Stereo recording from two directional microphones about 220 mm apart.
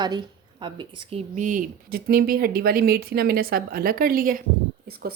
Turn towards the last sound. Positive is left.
turn(degrees=-45)  # may be behind; listen again after turning